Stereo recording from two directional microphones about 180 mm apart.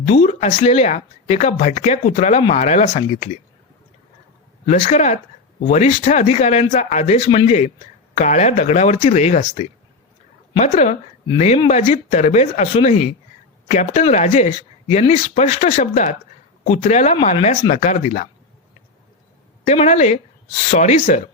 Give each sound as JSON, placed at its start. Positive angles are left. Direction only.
{"t": 0.0, "sound": "speech", "side_deg": 40}
{"t": 4.6, "sound": "speech", "side_deg": 40}
{"t": 19.6, "sound": "speech", "side_deg": 40}